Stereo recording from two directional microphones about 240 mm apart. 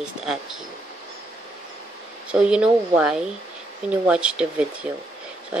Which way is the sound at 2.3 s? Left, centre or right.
Centre.